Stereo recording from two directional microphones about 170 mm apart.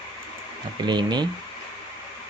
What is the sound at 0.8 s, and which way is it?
Speech, 25° right (ahead or behind).